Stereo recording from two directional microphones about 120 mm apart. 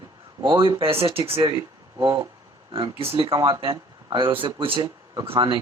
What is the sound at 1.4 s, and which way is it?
Speech, 35° right (ahead or behind).